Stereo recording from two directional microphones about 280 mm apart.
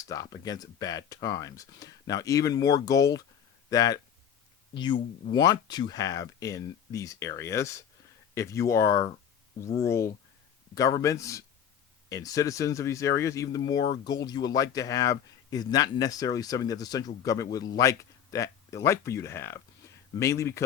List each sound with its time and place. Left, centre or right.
0.0 s speech: centre